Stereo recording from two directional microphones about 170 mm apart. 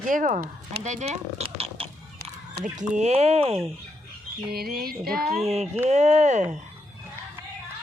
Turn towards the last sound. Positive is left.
turn(degrees=-40)  # may be behind; listen again after turning